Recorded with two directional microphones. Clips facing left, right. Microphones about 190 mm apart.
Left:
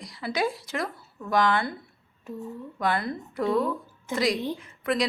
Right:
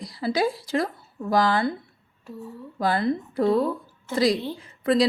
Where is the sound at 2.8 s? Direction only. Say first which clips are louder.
Right 5 dB; 30° right (ahead or behind).